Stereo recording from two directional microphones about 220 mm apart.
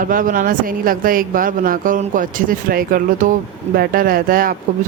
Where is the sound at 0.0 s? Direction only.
40° right (ahead or behind).